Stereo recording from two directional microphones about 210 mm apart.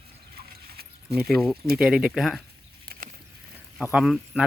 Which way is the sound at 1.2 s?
Centre (ahead or behind).